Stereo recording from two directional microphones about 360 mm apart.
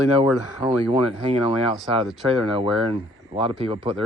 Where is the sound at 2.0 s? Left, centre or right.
Centre.